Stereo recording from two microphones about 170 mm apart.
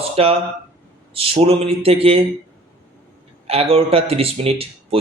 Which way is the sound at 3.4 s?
35° right (ahead or behind).